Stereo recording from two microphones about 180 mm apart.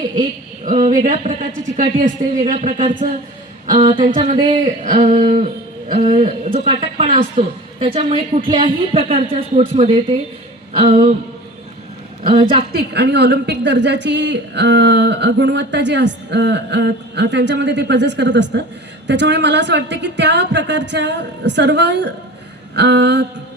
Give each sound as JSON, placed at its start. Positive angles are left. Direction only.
{"t": 0.6, "sound": "speech", "side_deg": -45}
{"t": 3.8, "sound": "a woman's voice", "side_deg": -35}
{"t": 4.8, "sound": "a woman's voice", "side_deg": -45}
{"t": 10.7, "sound": "a sound", "side_deg": -35}
{"t": 12.2, "sound": "speech", "side_deg": -30}
{"t": 12.7, "sound": "a woman's voice", "side_deg": -70}